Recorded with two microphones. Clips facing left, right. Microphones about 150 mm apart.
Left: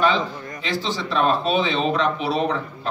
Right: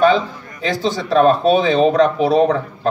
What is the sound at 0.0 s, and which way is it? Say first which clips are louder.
A man's voice: right 7 dB; 40° right (ahead or behind).